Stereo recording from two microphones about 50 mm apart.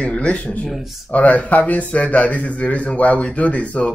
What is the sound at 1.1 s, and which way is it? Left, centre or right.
Speech, left.